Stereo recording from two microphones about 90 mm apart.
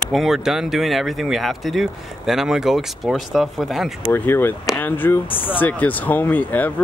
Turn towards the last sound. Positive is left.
turn(degrees=20)  # may be behind; listen again after turning